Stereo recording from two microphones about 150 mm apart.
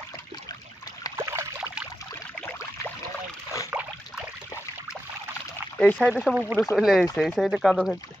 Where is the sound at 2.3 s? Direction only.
15° left (ahead or behind).